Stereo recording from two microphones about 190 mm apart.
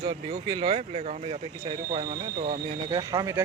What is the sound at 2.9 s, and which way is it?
Speech, 20° right (ahead or behind).